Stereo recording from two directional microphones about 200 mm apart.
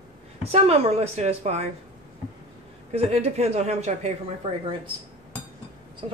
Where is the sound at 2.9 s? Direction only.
30° right (ahead or behind).